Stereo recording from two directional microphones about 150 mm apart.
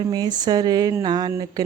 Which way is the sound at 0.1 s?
25° right (ahead or behind).